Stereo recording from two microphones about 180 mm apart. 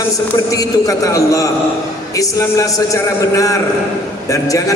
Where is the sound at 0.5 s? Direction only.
20° left (ahead or behind).